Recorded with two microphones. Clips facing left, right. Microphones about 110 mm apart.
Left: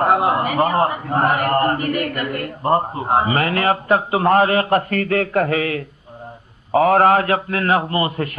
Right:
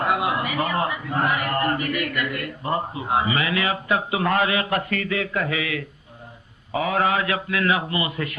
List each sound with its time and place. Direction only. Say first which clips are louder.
0.0 s a man's voice: left 6 dB; 40° left (ahead or behind)